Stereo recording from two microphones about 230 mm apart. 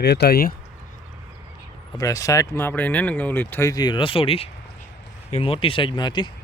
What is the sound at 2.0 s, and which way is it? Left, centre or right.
Speech, centre.